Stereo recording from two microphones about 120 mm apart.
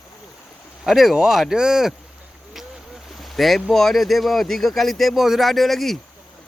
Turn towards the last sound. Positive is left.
turn(degrees=0)  # may be behind; listen again after turning